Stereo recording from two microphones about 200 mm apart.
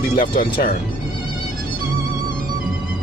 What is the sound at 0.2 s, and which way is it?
Speech, 45° left (ahead or behind).